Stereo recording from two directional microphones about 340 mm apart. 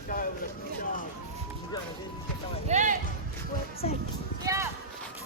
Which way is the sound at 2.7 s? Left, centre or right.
Right.